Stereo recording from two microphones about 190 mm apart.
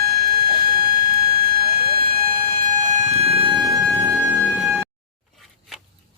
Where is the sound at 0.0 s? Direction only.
55° right (ahead or behind); by 4.1 s 20° right (ahead or behind).